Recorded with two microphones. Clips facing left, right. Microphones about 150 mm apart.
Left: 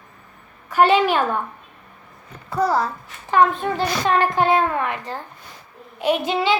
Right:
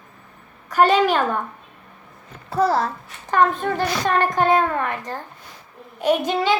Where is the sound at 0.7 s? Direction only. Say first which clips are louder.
Even; 45° right (ahead or behind).